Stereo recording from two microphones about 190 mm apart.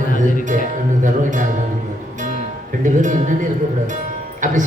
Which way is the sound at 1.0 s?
40° right (ahead or behind).